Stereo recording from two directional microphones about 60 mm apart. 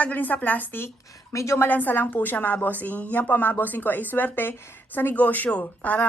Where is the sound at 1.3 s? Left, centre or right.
Left.